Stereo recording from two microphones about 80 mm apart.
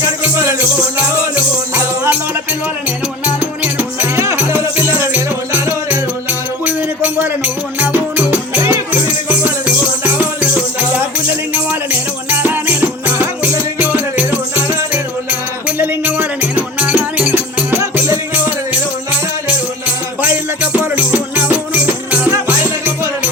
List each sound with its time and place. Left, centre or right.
1.4 s music: right
4.1 s music: right
20.2 s music: right